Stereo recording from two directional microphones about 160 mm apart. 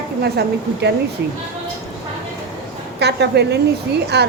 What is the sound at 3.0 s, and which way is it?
A woman's voice, 90° right.